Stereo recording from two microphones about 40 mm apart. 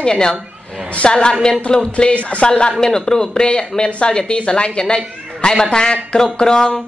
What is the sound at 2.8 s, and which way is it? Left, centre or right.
Speech, centre.